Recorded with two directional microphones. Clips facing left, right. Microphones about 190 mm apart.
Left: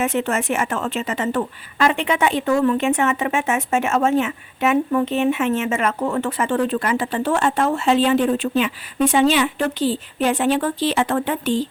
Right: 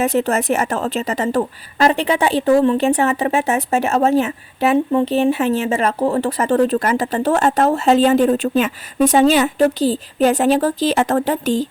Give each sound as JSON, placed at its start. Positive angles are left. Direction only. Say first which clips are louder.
{"t": 0.0, "sound": "a woman's voice", "louder": "right 4 dB", "side_deg": -35}